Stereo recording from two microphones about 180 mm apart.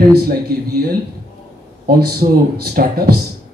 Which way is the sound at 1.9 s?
55° right (ahead or behind).